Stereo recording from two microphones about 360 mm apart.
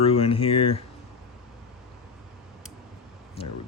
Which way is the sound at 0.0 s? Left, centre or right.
Centre.